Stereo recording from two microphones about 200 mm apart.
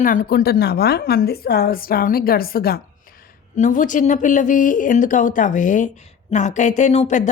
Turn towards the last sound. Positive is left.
turn(degrees=35)  # may be behind; listen again after turning